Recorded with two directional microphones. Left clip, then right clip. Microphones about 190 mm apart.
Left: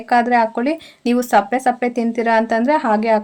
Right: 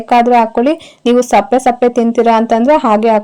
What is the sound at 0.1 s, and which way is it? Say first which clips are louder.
Speech: right 6 dB; 35° right (ahead or behind).